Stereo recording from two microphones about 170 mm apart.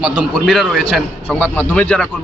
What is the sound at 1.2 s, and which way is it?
Speech, 10° left (ahead or behind).